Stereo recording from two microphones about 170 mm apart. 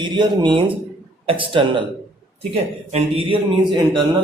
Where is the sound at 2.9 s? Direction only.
30° right (ahead or behind).